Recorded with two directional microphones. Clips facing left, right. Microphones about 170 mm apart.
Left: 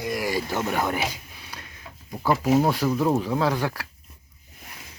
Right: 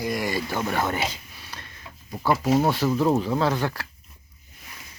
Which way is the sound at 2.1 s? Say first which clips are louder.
Left 1 dB; centre (ahead or behind).